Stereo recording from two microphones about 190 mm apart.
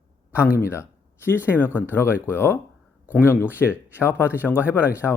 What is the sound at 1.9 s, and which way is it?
Speech, 10° left (ahead or behind).